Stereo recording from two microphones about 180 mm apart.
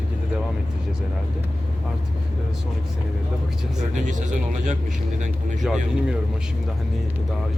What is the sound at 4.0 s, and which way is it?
Speech, 45° right (ahead or behind).